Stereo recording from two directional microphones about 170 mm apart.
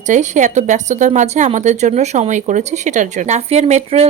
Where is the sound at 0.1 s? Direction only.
45° right (ahead or behind).